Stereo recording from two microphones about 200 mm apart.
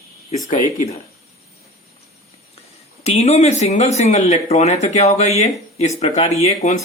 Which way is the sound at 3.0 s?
35° left (ahead or behind).